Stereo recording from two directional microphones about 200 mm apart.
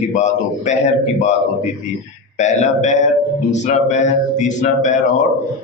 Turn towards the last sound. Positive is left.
turn(degrees=35)  # may be behind; listen again after turning